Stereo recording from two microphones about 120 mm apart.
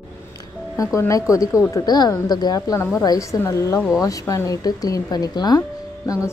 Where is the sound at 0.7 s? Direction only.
25° left (ahead or behind).